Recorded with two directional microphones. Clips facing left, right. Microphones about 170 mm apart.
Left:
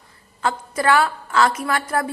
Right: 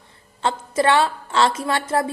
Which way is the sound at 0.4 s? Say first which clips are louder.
Right 1 dB; 25° right (ahead or behind).